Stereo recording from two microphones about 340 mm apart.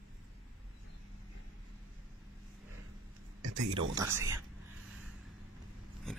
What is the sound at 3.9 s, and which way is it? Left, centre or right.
Speech, centre.